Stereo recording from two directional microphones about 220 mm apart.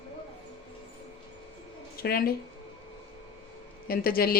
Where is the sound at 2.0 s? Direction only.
45° left (ahead or behind).